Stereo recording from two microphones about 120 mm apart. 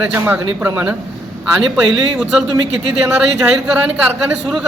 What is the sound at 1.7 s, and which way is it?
Speech, centre (ahead or behind).